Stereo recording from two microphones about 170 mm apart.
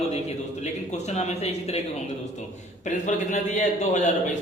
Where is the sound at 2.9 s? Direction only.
45° left (ahead or behind).